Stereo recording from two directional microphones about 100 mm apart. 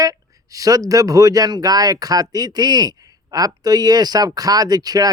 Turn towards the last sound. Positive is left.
turn(degrees=-40)  # may be behind; listen again after turning